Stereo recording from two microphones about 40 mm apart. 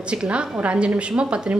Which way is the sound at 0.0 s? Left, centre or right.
Right.